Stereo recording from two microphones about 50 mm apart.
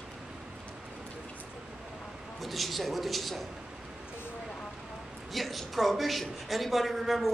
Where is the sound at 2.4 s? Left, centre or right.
Centre.